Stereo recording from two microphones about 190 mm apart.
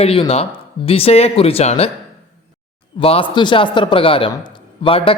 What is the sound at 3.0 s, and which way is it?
A man's voice, 30° left (ahead or behind).